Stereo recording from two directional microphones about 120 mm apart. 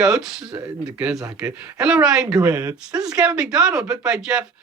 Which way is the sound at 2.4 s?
20° right (ahead or behind).